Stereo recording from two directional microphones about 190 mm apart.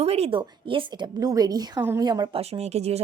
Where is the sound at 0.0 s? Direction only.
35° right (ahead or behind).